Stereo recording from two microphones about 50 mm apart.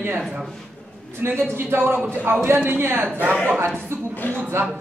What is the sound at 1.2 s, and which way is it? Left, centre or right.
A man's voice, right.